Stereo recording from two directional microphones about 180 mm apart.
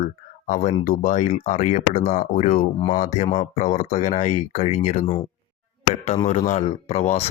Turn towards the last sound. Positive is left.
turn(degrees=40)  # may be behind; listen again after turning